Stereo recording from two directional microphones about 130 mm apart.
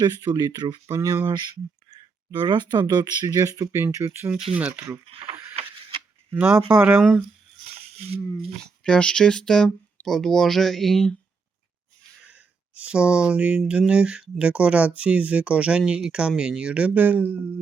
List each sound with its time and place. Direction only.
0.0 s speech: 30° right (ahead or behind); by 4.9 s 15° right (ahead or behind)
5.0 s speech: 45° right (ahead or behind)
6.3 s speech: 15° right (ahead or behind)
8.4 s speech: 5° left (ahead or behind)
12.3 s speech: 10° right (ahead or behind)